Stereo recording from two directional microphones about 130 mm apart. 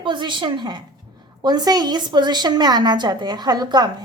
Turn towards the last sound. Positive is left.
turn(degrees=-30)  # may be behind; listen again after turning